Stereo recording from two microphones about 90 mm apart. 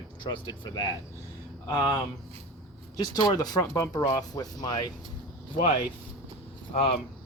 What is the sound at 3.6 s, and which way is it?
Speech, 35° left (ahead or behind).